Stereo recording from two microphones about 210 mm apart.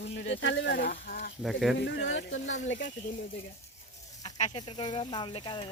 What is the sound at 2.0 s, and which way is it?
Speech, 60° left (ahead or behind).